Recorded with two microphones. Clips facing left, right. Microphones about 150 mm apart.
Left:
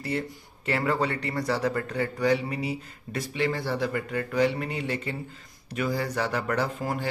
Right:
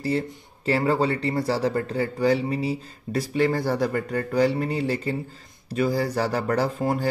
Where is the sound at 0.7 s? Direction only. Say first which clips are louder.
Right 4 dB; 30° right (ahead or behind).